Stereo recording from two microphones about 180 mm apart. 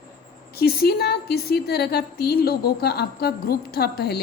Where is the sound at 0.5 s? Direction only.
60° left (ahead or behind).